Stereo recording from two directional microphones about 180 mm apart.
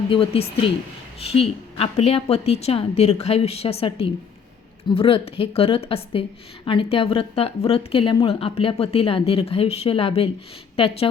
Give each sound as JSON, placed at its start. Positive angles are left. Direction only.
{"t": 0.1, "sound": "a woman's voice", "side_deg": 30}